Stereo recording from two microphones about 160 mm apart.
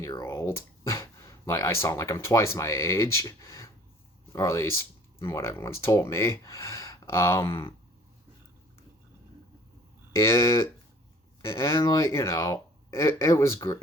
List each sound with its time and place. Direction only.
0.2 s speech: 15° left (ahead or behind)
10.1 s speech: 15° left (ahead or behind)